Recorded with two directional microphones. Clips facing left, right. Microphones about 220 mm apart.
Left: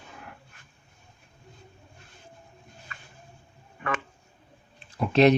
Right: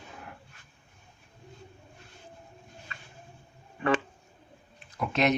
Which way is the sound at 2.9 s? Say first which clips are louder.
Left 1 dB; 30° right (ahead or behind).